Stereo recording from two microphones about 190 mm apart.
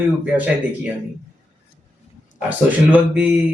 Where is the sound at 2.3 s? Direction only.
5° right (ahead or behind).